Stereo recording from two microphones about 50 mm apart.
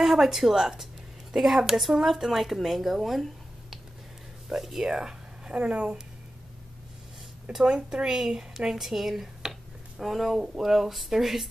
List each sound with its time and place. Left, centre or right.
0.0 s speech: centre
4.5 s speech: centre
4.9 s speech: centre
7.5 s speech: centre